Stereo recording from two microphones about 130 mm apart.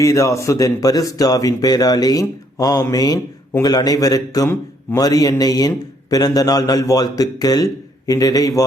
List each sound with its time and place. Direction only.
0.0 s a man's voice: 25° left (ahead or behind)